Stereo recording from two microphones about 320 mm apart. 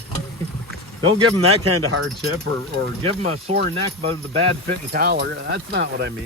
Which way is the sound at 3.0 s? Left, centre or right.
Centre.